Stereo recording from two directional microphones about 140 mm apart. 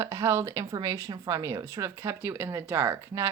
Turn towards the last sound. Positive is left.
turn(degrees=-20)  # may be behind; listen again after turning